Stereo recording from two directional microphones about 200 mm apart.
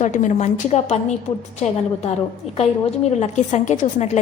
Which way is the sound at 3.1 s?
35° left (ahead or behind).